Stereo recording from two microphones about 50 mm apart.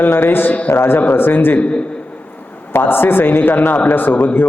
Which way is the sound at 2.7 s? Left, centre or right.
Left.